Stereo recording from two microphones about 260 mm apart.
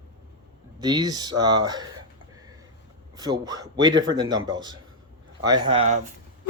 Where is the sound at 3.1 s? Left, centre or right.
Centre.